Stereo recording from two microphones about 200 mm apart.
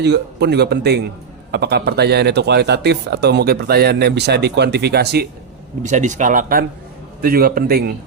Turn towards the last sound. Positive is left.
turn(degrees=-50)  # may be behind; listen again after turning